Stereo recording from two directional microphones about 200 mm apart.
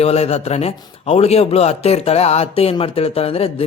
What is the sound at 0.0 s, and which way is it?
A man's voice, 30° left (ahead or behind).